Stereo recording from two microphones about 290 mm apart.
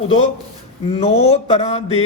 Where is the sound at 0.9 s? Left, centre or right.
Left.